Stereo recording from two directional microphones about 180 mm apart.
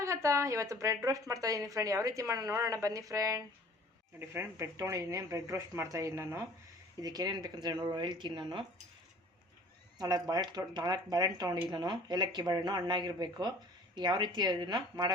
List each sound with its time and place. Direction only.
0.0 s speech: 15° right (ahead or behind)
10.0 s speech: 20° right (ahead or behind)